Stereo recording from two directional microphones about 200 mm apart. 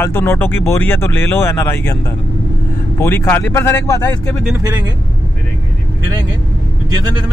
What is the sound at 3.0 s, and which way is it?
Speech, 10° left (ahead or behind).